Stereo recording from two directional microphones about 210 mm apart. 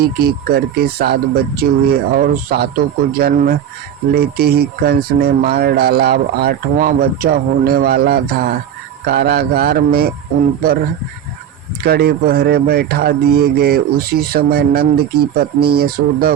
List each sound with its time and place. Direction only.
0.0 s speech: 45° right (ahead or behind)
11.8 s speech: 45° right (ahead or behind)